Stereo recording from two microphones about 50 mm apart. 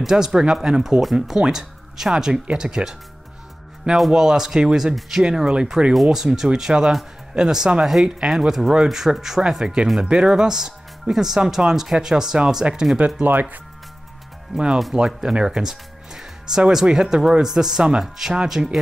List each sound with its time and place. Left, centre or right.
0.0 s speech: centre
4.1 s speech: centre
12.6 s speech: right
14.5 s speech: centre